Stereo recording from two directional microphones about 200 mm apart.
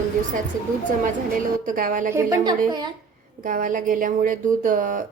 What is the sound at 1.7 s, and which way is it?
Speech, 40° right (ahead or behind).